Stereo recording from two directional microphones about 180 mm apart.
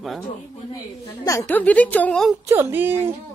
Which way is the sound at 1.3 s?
15° left (ahead or behind).